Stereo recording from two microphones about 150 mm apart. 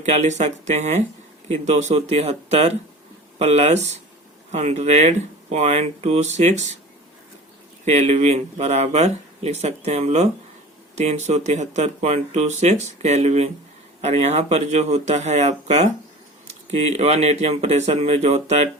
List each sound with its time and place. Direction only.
0.1 s speech: 50° right (ahead or behind)
7.9 s speech: 50° right (ahead or behind)